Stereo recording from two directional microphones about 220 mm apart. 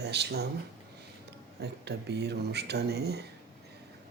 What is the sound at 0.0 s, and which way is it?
Speech, 50° right (ahead or behind).